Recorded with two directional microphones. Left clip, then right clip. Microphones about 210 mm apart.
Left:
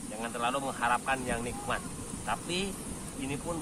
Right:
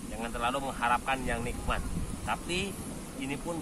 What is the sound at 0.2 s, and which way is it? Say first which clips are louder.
Speech: even; 5° left (ahead or behind).